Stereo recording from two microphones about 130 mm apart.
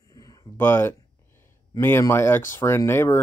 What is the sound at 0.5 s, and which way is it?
Speech, 15° left (ahead or behind).